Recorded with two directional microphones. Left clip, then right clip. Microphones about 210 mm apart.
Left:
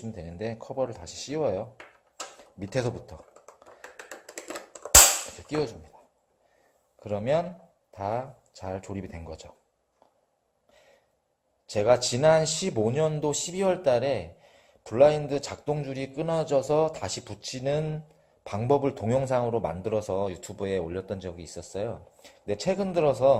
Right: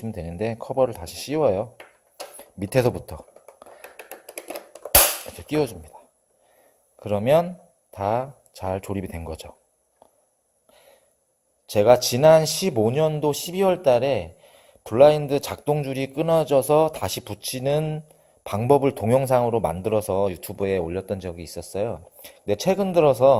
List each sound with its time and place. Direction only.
0.0 s speech: 40° right (ahead or behind)
3.4 s finger snapping: centre (ahead or behind)
7.0 s speech: 40° right (ahead or behind)
10.7 s a sound: 40° right (ahead or behind)
11.6 s speech: 40° right (ahead or behind)